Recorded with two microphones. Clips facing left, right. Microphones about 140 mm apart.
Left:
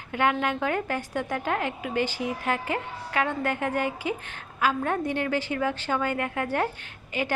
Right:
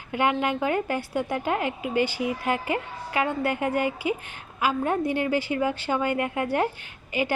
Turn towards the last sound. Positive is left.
turn(degrees=-10)  # may be behind; listen again after turning